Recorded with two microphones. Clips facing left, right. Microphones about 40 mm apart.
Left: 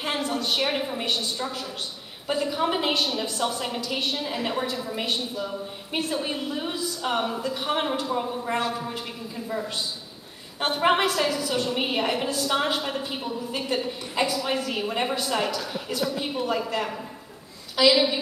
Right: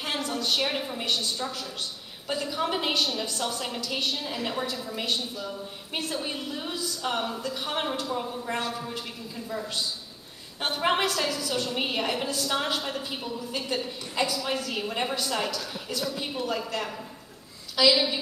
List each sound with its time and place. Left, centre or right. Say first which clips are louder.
0.0 s a woman's voice: left 3 dB; centre